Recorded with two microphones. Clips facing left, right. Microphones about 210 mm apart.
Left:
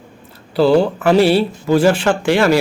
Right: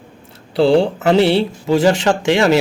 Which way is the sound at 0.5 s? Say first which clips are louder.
Even; 30° right (ahead or behind).